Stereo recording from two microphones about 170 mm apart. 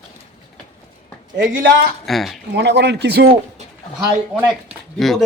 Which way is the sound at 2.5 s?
90° right.